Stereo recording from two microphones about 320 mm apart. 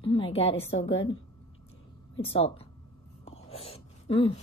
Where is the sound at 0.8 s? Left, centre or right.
Left.